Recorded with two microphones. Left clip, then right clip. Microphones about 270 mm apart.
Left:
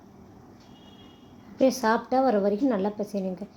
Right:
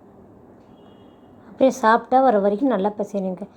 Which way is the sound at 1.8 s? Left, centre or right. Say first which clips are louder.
Right 7 dB; centre.